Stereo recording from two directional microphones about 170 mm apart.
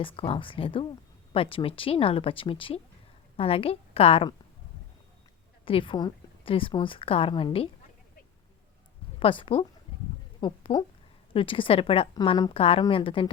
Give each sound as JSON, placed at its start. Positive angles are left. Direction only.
{"t": 0.0, "sound": "a woman's voice", "side_deg": 30}
{"t": 5.6, "sound": "a woman's voice", "side_deg": 30}
{"t": 9.1, "sound": "a woman's voice", "side_deg": 35}